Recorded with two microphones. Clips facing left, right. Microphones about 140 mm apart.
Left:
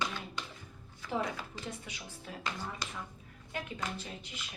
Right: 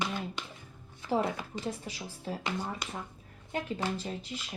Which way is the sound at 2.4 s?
20° right (ahead or behind).